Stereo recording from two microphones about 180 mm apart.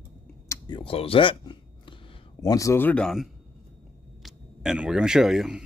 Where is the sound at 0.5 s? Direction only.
25° left (ahead or behind).